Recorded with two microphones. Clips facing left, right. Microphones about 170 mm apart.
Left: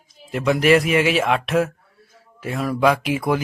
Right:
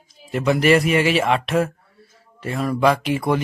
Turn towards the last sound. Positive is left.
turn(degrees=0)  # may be behind; listen again after turning